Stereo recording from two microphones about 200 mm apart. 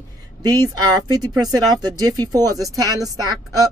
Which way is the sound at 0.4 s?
20° right (ahead or behind).